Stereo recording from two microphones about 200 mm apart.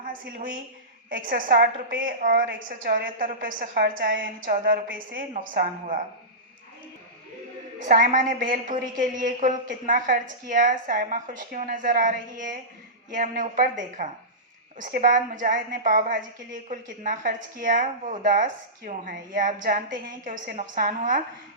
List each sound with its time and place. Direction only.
0.0 s a woman's voice: 45° right (ahead or behind)
7.8 s a woman's voice: 40° right (ahead or behind)